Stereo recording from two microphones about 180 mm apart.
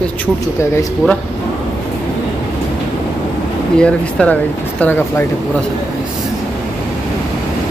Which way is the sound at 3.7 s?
5° left (ahead or behind).